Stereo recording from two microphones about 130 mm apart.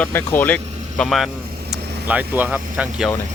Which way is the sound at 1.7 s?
10° right (ahead or behind).